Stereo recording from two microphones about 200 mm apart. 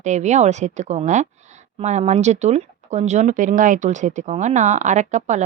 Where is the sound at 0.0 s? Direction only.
35° right (ahead or behind).